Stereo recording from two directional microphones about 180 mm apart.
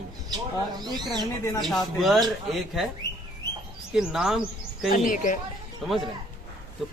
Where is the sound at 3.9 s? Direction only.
5° right (ahead or behind).